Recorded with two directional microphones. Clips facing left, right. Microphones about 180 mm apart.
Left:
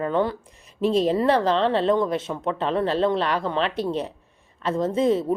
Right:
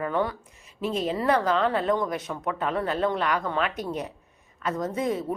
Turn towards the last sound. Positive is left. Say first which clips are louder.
# left 6 dB
turn(degrees=25)  # may be behind; listen again after turning